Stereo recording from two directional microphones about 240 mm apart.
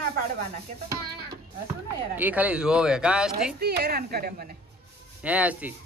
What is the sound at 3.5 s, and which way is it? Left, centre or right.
A woman's voice, right.